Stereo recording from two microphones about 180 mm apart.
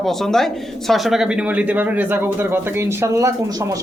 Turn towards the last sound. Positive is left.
turn(degrees=-20)  # may be behind; listen again after turning